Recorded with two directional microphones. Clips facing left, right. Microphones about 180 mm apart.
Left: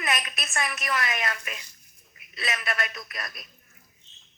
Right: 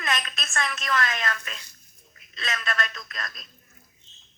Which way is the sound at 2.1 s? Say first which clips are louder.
Left 1 dB; 15° left (ahead or behind).